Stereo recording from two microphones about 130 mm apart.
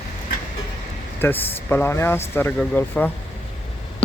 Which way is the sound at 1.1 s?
15° left (ahead or behind).